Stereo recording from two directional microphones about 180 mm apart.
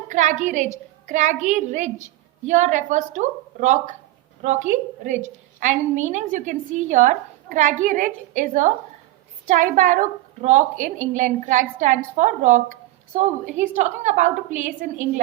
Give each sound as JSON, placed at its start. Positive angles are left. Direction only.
{"t": 0.1, "sound": "a woman's voice", "side_deg": -40}